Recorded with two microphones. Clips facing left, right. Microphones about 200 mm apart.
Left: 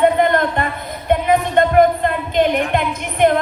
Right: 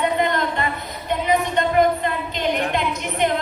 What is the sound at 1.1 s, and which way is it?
Music, 55° left (ahead or behind).